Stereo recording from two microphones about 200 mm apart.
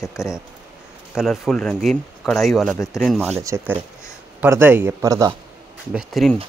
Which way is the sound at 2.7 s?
15° left (ahead or behind).